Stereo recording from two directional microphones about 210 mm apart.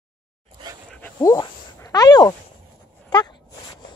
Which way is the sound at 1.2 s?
20° left (ahead or behind).